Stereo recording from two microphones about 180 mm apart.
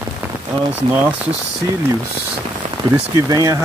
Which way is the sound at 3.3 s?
20° right (ahead or behind).